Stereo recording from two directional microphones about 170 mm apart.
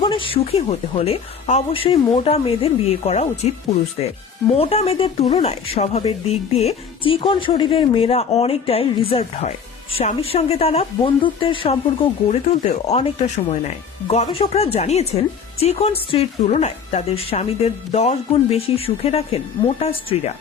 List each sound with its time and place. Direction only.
0.0 s speech: 30° left (ahead or behind)